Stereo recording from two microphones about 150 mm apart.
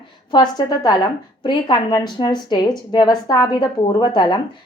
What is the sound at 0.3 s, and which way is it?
A woman's voice, 30° left (ahead or behind).